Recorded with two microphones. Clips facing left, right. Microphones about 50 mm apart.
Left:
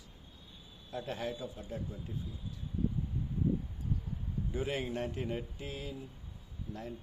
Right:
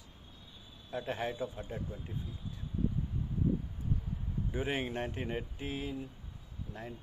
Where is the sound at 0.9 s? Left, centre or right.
Right.